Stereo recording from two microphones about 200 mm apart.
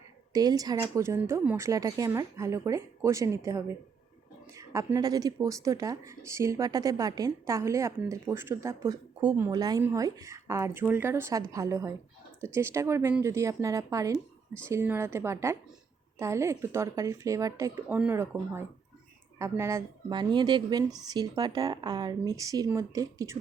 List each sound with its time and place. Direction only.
0.3 s a woman's voice: 20° right (ahead or behind)